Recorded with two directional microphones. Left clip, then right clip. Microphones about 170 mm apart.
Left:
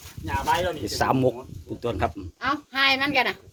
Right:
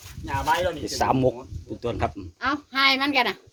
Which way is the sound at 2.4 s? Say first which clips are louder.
Right 1 dB; 50° right (ahead or behind).